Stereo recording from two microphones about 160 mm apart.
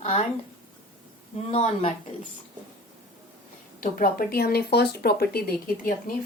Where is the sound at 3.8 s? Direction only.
60° left (ahead or behind).